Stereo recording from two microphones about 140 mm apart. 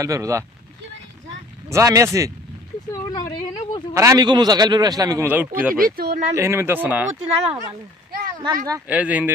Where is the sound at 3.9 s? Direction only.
25° right (ahead or behind).